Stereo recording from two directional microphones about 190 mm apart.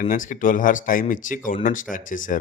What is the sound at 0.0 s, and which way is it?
Speech, 45° left (ahead or behind).